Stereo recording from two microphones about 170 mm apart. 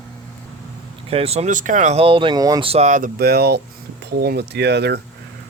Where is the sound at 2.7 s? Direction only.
45° right (ahead or behind).